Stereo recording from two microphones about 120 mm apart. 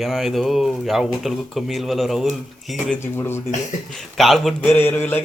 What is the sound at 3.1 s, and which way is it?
Speech, 20° left (ahead or behind).